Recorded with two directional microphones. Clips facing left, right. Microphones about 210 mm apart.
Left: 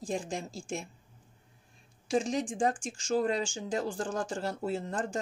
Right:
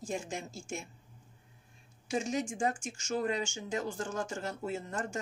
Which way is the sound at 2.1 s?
35° left (ahead or behind).